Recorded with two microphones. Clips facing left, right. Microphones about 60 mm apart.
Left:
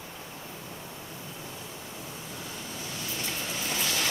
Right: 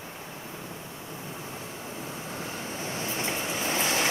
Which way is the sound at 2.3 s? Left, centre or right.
Right.